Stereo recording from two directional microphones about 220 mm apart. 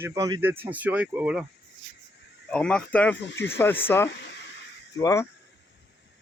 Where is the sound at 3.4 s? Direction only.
10° left (ahead or behind).